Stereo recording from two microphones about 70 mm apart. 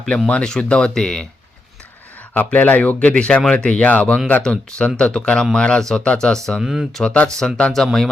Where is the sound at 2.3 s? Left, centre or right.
Left.